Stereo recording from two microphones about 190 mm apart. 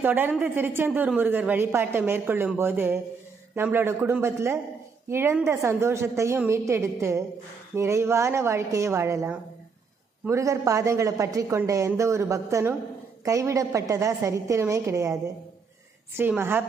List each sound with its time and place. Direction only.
0.0 s a woman's voice: 10° right (ahead or behind)